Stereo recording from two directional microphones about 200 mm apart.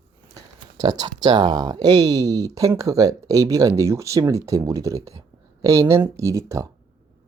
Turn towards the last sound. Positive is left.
turn(degrees=-15)  # may be behind; listen again after turning